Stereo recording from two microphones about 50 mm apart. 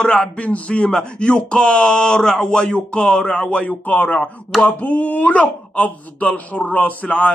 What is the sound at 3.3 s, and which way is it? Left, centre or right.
Speech, left.